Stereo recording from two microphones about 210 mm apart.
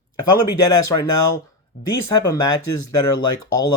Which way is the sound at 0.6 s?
20° left (ahead or behind).